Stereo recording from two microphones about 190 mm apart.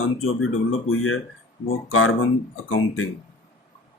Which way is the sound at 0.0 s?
90° left.